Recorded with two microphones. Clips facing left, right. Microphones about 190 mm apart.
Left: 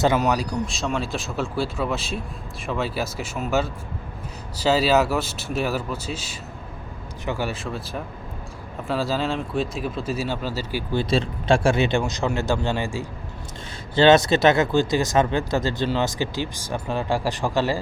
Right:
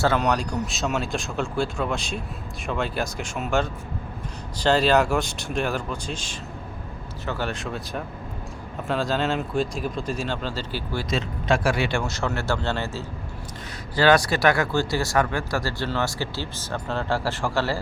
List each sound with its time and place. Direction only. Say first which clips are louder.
0.2 s speech: left 1 dB; 5° left (ahead or behind)
11.1 s speech: left 3 dB; 30° left (ahead or behind); by 13.1 s 15° left (ahead or behind)
13.9 s speech: left 4 dB; 25° left (ahead or behind)